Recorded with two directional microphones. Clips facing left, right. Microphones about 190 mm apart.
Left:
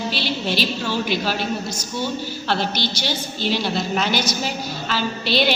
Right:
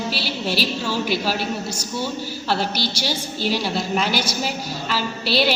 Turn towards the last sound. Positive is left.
turn(degrees=-5)  # may be behind; listen again after turning